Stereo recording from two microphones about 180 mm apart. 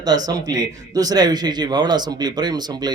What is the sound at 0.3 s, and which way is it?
A man's voice, 20° right (ahead or behind).